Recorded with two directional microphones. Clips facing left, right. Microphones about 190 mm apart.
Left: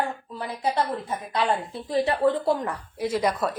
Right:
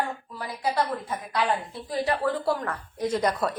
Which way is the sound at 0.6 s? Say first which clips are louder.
Left 1 dB; 25° left (ahead or behind).